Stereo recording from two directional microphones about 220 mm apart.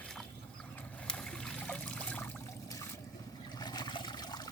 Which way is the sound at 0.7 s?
5° left (ahead or behind).